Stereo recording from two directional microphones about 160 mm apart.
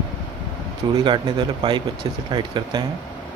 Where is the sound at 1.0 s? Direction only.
30° right (ahead or behind).